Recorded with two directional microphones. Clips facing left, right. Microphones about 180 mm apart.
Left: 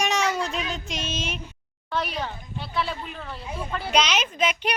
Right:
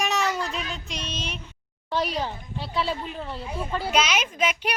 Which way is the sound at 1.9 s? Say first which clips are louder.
Right 2 dB; 30° right (ahead or behind).